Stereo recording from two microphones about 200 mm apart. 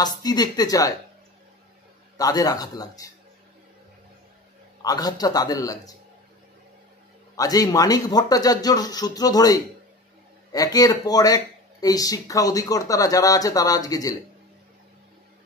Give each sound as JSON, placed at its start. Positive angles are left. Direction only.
{"t": 0.0, "sound": "speech", "side_deg": 20}
{"t": 2.1, "sound": "speech", "side_deg": 20}
{"t": 4.8, "sound": "speech", "side_deg": 20}
{"t": 7.3, "sound": "speech", "side_deg": 20}